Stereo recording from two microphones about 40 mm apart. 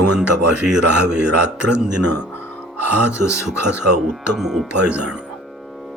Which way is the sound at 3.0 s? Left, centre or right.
Right.